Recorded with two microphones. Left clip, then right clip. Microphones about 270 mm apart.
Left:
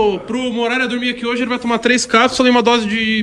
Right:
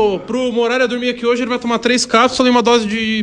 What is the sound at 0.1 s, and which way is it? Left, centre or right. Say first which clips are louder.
A man's voice: right 3 dB; centre.